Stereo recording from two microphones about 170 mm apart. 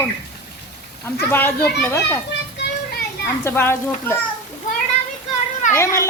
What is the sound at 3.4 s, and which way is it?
Speech, 15° left (ahead or behind).